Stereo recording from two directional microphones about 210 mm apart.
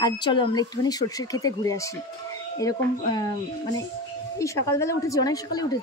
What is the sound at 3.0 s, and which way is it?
Speech, 20° left (ahead or behind).